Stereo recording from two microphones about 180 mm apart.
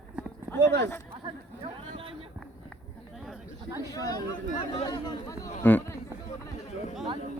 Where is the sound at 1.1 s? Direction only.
30° right (ahead or behind).